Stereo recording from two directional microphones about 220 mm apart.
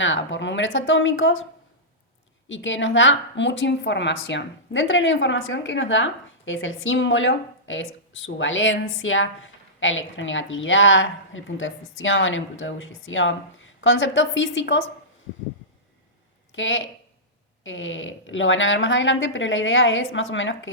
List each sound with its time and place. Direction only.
0.0 s a woman's voice: 60° left (ahead or behind)
2.5 s a woman's voice: 60° left (ahead or behind)
16.5 s a woman's voice: 60° left (ahead or behind)